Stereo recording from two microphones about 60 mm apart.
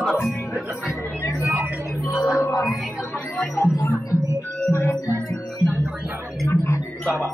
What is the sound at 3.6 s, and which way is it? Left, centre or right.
Music, left.